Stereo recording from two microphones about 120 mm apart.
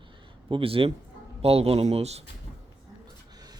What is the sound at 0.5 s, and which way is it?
Speech, 50° right (ahead or behind).